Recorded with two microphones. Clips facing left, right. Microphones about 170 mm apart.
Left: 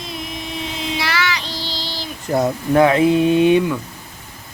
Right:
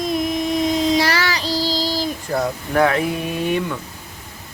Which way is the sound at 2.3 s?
25° left (ahead or behind).